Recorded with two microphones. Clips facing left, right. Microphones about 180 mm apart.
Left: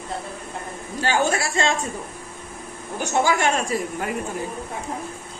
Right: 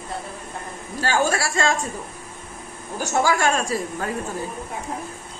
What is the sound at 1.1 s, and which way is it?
Speech, 20° left (ahead or behind).